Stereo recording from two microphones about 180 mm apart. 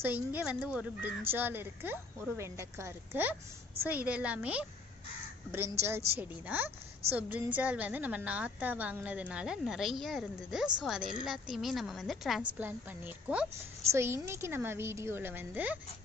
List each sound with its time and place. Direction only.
0.0 s a woman's voice: 10° right (ahead or behind)